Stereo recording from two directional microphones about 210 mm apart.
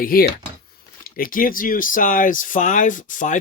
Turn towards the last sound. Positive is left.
turn(degrees=40)  # may be behind; listen again after turning